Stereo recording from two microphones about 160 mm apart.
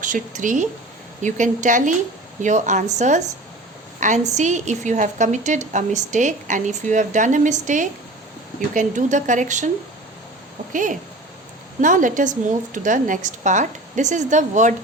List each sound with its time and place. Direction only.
0.0 s a woman's voice: 55° right (ahead or behind)
10.7 s a woman's voice: 55° right (ahead or behind)